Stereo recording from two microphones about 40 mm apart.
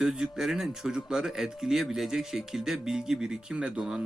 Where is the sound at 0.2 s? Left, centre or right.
Centre.